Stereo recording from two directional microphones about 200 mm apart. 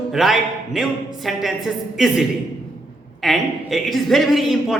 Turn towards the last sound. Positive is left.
turn(degrees=0)  # may be behind; listen again after turning